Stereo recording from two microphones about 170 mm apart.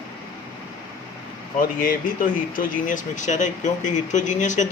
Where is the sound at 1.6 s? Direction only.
55° left (ahead or behind).